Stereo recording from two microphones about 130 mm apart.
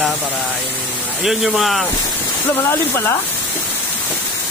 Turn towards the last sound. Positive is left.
turn(degrees=20)  # may be behind; listen again after turning